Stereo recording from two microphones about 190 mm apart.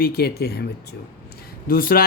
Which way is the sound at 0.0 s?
55° left (ahead or behind).